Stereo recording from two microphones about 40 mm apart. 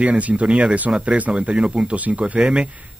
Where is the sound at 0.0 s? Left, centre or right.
Right.